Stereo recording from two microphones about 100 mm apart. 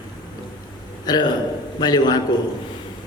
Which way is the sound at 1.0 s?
45° left (ahead or behind).